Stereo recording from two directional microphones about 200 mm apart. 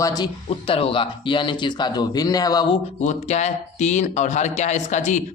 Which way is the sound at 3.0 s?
35° left (ahead or behind).